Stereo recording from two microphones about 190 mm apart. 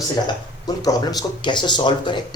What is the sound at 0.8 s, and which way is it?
Speech, 20° left (ahead or behind).